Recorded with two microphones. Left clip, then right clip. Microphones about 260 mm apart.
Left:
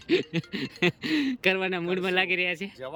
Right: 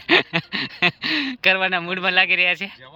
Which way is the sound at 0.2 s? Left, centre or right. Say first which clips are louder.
Right 10 dB; centre.